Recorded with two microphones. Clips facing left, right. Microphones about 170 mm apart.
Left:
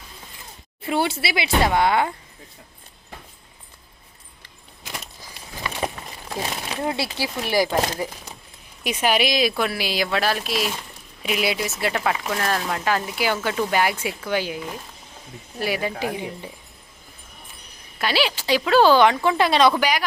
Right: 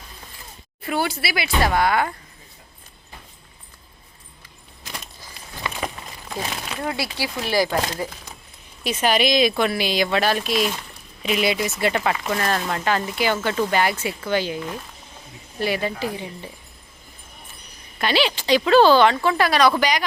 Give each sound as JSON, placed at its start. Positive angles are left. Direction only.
{"t": 0.9, "sound": "speech", "side_deg": 25}
{"t": 6.3, "sound": "a sound", "side_deg": 5}
{"t": 6.8, "sound": "speech", "side_deg": 25}
{"t": 7.3, "sound": "speech", "side_deg": 15}
{"t": 8.8, "sound": "speech", "side_deg": 10}
{"t": 18.0, "sound": "speech", "side_deg": 5}
{"t": 19.7, "sound": "speech", "side_deg": 5}